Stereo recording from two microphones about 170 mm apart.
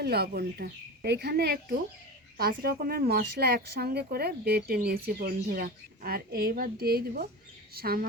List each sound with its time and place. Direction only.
0.0 s speech: 70° right (ahead or behind)